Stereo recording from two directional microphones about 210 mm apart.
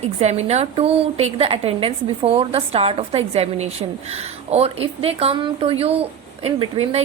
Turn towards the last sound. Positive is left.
turn(degrees=-30)  # may be behind; listen again after turning